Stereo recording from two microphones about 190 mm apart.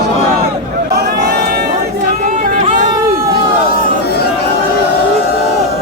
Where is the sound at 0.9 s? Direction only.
55° right (ahead or behind).